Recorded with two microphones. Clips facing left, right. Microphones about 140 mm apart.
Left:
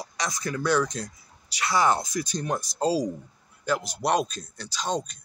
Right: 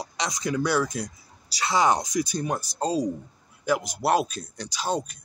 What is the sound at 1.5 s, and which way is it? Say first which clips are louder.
Speech: right 1 dB; 25° right (ahead or behind).